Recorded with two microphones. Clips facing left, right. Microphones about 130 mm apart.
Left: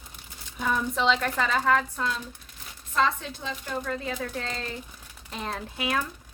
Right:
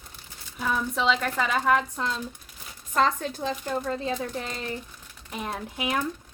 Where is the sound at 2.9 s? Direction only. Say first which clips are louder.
Right 2 dB; 45° right (ahead or behind); by 4.1 s 30° right (ahead or behind).